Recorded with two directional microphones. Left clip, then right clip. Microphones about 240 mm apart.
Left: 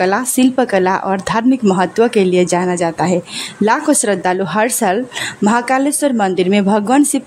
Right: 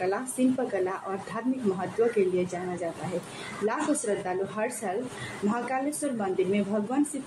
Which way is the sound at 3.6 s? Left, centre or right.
Left.